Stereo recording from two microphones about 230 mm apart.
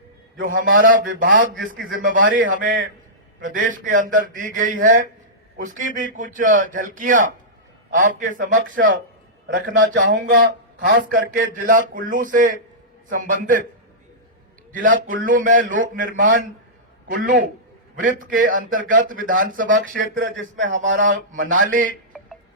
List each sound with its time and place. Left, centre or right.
0.7 s speech: right
9.7 s a man's voice: right
14.7 s speech: right